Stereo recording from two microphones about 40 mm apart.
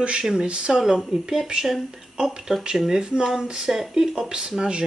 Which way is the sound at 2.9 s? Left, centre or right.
Right.